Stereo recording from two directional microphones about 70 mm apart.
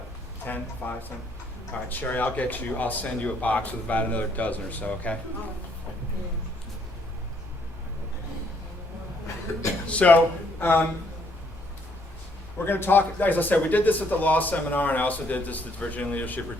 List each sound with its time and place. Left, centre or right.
0.4 s speech: left
9.8 s speech: centre
10.6 s speech: left
12.5 s speech: left